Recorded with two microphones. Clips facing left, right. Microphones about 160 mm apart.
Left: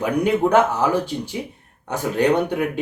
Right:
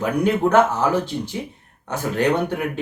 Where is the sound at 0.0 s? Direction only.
15° left (ahead or behind).